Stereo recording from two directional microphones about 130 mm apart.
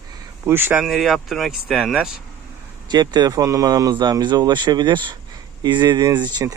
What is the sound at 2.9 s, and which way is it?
Speech, 35° right (ahead or behind).